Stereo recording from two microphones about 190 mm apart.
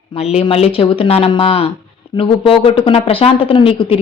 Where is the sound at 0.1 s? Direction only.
35° left (ahead or behind).